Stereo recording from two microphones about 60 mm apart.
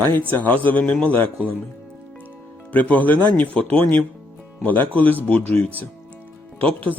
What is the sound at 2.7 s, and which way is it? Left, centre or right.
Speech, left.